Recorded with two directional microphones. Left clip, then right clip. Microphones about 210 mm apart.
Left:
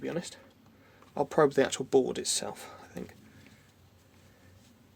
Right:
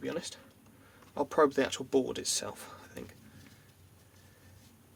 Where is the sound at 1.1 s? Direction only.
25° left (ahead or behind).